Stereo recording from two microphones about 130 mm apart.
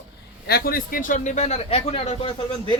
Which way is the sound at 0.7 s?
90° left.